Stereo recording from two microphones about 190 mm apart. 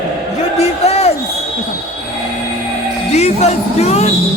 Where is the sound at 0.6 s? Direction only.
35° left (ahead or behind).